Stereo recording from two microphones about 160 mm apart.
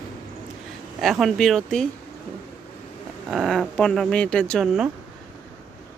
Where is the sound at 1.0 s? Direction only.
Centre (ahead or behind).